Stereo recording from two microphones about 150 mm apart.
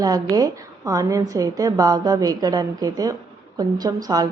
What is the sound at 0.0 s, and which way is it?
A woman's voice, 25° right (ahead or behind).